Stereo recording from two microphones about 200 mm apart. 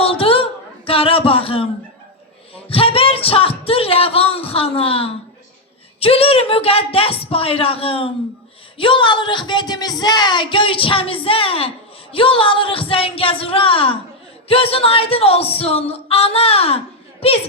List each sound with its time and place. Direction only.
0.0 s a sound: 30° left (ahead or behind)
0.9 s speech: 30° left (ahead or behind)
2.6 s speech: 30° left (ahead or behind)